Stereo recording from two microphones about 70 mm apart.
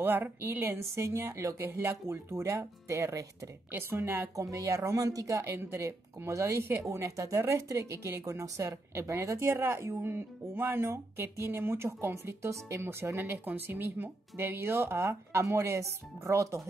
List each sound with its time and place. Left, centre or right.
0.0 s speech: right
3.7 s speech: right
4.4 s speech: right
5.5 s speech: right